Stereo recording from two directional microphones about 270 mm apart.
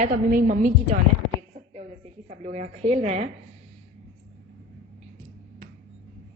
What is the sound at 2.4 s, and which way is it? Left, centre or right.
Speech, right.